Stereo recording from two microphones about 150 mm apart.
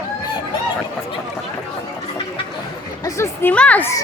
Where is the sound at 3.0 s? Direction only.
15° left (ahead or behind).